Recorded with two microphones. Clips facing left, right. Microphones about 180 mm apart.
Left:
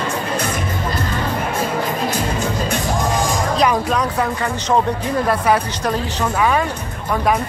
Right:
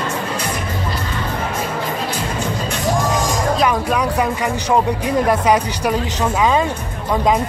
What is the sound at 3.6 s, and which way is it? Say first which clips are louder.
Speech: left 3 dB; 5° right (ahead or behind).